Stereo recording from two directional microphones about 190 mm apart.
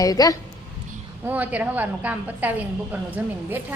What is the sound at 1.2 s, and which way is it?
A woman's voice, 10° right (ahead or behind).